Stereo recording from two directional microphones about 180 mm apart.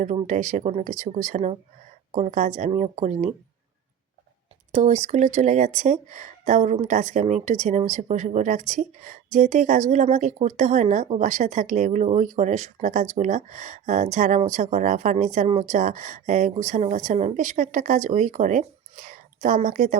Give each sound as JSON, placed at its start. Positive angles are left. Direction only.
{"t": 0.3, "sound": "speech", "side_deg": -45}
{"t": 4.7, "sound": "a woman's voice", "side_deg": -40}